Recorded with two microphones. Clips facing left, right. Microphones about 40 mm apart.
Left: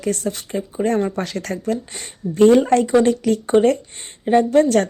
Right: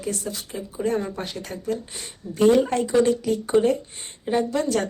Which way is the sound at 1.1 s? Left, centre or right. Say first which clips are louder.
Left 7 dB; left.